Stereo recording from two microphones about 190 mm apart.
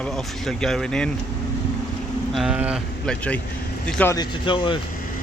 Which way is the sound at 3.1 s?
5° left (ahead or behind).